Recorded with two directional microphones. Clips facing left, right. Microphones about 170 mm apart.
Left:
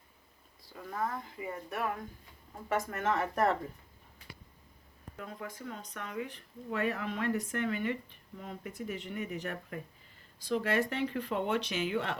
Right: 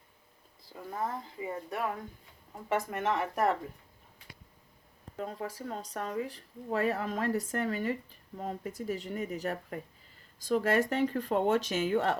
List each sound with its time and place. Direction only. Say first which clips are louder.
0.9 s speech: even; 25° right (ahead or behind)
5.1 s speech: right 6 dB; 35° right (ahead or behind)